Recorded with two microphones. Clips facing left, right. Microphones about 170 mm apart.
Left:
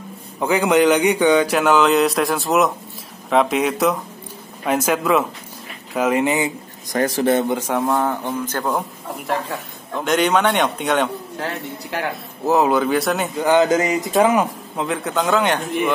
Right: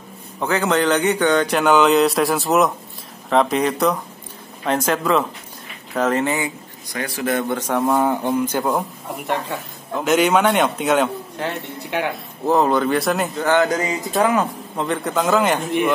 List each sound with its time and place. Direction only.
0.4 s a man's voice: 15° left (ahead or behind)
6.9 s speech: 40° left (ahead or behind)
7.2 s speech: 25° left (ahead or behind)
7.5 s speech: 10° left (ahead or behind)
7.8 s a man's voice: 5° right (ahead or behind)
13.4 s speech: 15° left (ahead or behind)
14.8 s a man's voice: centre (ahead or behind)